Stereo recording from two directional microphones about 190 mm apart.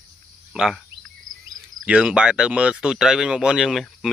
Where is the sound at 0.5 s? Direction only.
5° right (ahead or behind).